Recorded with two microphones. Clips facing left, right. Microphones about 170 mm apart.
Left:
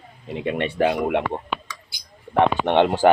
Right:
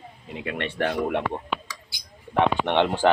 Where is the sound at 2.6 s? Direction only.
50° left (ahead or behind).